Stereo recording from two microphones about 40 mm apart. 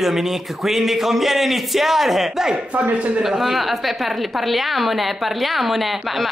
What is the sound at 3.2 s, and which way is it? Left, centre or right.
A woman's voice, centre.